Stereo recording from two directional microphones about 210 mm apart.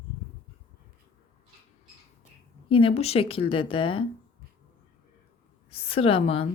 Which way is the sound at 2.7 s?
25° left (ahead or behind).